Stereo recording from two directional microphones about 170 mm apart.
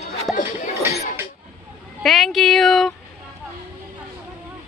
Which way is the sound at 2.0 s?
Centre (ahead or behind).